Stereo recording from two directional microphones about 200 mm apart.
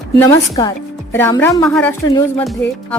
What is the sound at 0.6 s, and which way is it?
A woman's voice, 15° left (ahead or behind).